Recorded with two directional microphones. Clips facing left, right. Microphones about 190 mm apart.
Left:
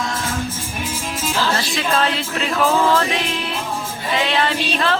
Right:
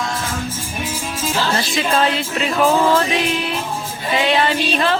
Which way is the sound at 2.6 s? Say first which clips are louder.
Right 2 dB; 15° right (ahead or behind).